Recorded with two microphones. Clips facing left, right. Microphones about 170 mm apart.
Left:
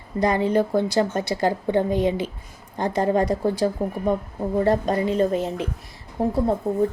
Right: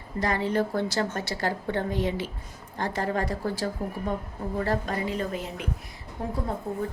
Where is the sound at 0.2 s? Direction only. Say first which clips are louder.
Left 6 dB; 15° left (ahead or behind).